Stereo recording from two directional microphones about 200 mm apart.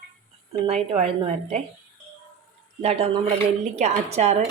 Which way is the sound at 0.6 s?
30° right (ahead or behind).